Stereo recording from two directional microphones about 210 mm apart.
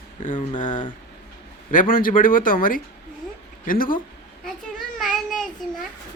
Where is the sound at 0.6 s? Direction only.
35° left (ahead or behind).